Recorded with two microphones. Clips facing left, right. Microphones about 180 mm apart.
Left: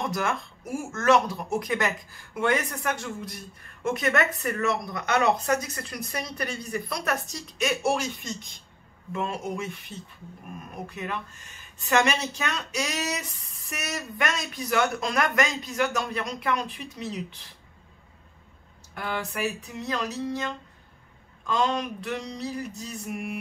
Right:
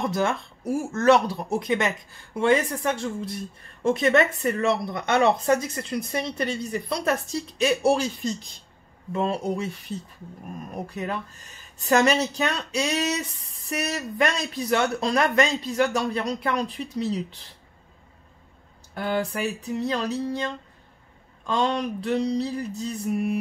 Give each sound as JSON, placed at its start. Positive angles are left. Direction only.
{"t": 0.1, "sound": "a woman's voice", "side_deg": -30}
{"t": 18.9, "sound": "a woman's voice", "side_deg": -35}